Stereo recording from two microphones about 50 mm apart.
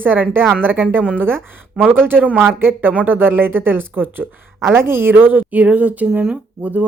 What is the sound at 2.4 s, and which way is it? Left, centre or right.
Speech, right.